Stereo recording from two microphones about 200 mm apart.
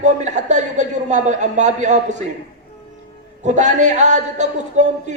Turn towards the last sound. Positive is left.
turn(degrees=-35)  # may be behind; listen again after turning